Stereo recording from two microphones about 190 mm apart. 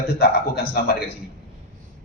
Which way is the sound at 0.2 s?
55° left (ahead or behind).